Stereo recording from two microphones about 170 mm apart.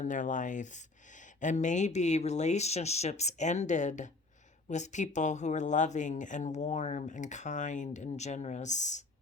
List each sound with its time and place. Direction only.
0.0 s speech: 45° left (ahead or behind)